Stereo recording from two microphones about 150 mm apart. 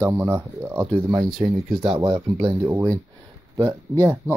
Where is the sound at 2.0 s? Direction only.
30° right (ahead or behind).